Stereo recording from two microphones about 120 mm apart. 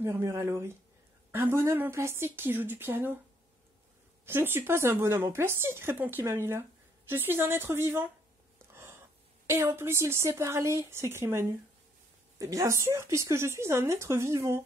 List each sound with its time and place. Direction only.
0.0 s speech: 20° right (ahead or behind)
4.3 s speech: 20° right (ahead or behind)
8.7 s a sound: 20° right (ahead or behind)
9.8 s speech: 20° right (ahead or behind)